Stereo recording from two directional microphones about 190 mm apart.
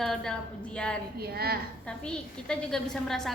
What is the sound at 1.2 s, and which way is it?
Speech, 55° right (ahead or behind).